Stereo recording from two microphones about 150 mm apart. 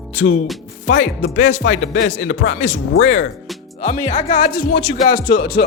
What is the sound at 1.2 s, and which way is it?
Speech, 50° left (ahead or behind).